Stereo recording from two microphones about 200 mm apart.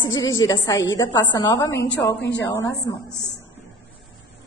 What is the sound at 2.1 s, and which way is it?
Speech, 60° left (ahead or behind).